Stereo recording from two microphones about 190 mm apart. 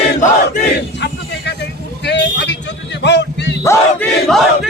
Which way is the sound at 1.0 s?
65° left (ahead or behind).